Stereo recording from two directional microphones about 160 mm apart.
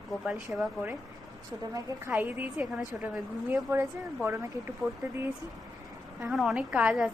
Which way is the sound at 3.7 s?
15° right (ahead or behind).